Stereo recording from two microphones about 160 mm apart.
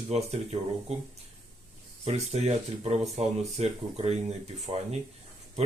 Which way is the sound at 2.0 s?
40° right (ahead or behind).